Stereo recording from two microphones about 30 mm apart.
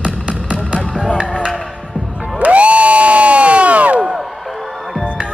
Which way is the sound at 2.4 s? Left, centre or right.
Right.